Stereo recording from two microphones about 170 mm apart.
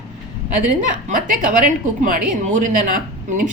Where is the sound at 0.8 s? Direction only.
50° right (ahead or behind).